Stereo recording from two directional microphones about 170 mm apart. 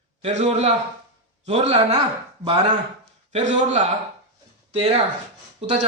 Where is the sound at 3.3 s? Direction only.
40° right (ahead or behind).